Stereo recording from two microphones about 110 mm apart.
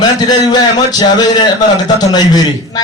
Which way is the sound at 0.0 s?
35° left (ahead or behind).